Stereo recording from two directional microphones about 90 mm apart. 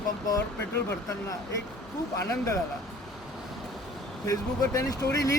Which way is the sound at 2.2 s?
35° left (ahead or behind).